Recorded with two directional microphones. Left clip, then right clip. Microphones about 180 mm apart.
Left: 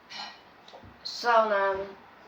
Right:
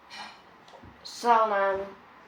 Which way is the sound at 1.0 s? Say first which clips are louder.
Right 1 dB; 40° right (ahead or behind).